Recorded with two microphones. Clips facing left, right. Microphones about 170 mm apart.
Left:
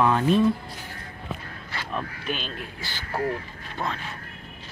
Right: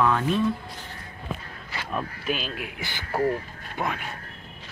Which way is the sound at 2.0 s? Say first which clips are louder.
Right 3 dB; 5° right (ahead or behind).